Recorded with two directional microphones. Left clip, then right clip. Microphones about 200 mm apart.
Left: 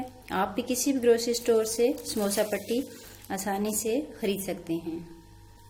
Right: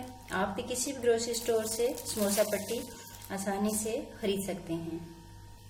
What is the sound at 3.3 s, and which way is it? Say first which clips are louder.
Speech: left 3 dB; 50° left (ahead or behind).